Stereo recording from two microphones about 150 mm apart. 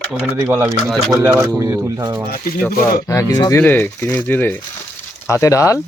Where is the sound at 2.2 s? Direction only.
80° left.